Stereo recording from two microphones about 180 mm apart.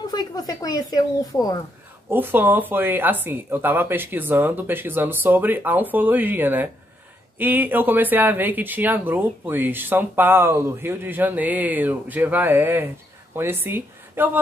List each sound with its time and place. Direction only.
0.0 s speech: 20° left (ahead or behind)
2.0 s speech: 10° right (ahead or behind)